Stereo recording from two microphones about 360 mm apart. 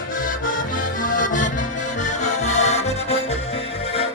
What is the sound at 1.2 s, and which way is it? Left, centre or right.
Music, left.